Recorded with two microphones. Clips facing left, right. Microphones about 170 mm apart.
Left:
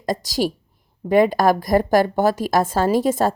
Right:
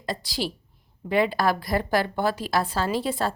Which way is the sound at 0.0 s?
45° left (ahead or behind).